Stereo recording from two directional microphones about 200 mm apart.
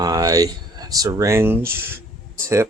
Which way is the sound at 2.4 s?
15° right (ahead or behind).